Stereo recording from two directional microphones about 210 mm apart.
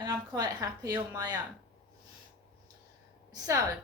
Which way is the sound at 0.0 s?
20° right (ahead or behind).